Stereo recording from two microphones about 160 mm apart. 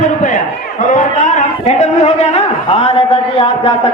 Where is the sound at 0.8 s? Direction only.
55° left (ahead or behind).